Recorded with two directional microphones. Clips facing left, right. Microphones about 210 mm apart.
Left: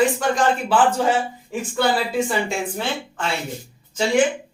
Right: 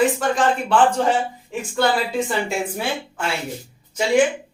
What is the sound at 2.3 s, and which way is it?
Speech, 5° right (ahead or behind).